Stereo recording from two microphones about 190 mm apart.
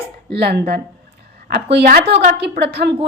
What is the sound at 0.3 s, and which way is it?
A woman's voice, 60° right (ahead or behind).